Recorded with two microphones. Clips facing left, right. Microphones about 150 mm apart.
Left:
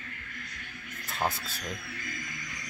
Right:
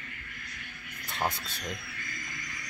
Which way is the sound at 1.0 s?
Centre (ahead or behind).